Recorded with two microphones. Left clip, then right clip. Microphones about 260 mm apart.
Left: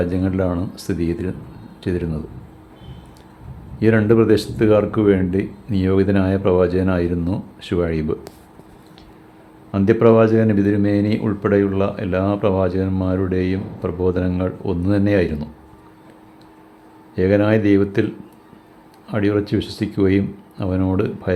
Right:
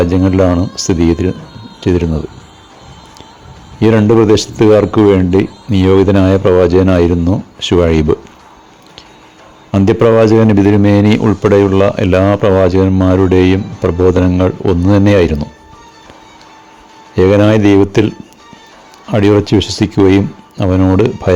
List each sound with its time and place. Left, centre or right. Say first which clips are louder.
0.0 s speech: right 10 dB; right
3.8 s speech: right 6 dB; right
9.7 s a man's voice: right 5 dB; right
17.2 s speech: right 8 dB; right
19.1 s speech: right 10 dB; right